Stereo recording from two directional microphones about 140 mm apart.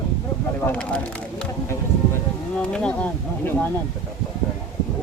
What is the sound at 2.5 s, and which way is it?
Speech, 5° left (ahead or behind).